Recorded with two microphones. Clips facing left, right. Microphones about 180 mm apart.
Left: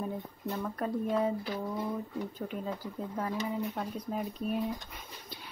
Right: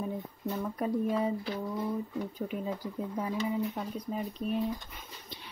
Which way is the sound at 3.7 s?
Centre (ahead or behind).